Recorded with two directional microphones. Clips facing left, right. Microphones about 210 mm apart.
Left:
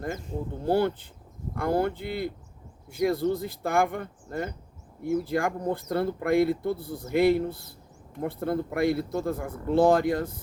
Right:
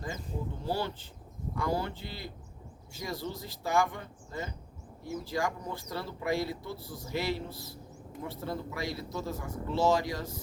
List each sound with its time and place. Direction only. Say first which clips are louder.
0.6 s speech: left 11 dB; 55° left (ahead or behind)